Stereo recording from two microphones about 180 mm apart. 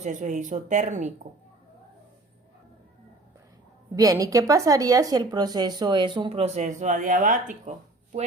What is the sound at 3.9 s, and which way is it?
Speech, 20° right (ahead or behind).